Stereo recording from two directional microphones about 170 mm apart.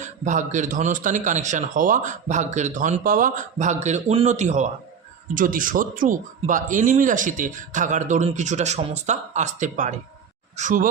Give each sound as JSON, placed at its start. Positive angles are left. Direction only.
{"t": 0.0, "sound": "a man's voice", "side_deg": -45}